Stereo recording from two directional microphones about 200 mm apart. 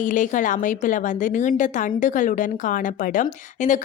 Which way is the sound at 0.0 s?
40° left (ahead or behind).